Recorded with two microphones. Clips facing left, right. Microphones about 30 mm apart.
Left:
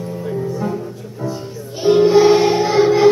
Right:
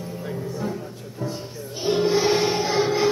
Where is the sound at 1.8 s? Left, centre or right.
Centre.